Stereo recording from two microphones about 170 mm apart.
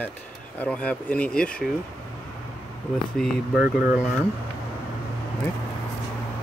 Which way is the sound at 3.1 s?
5° right (ahead or behind).